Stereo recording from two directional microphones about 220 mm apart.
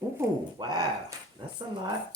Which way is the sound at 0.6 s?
20° right (ahead or behind).